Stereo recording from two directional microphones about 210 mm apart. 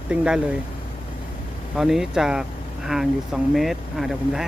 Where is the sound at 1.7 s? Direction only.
Centre (ahead or behind).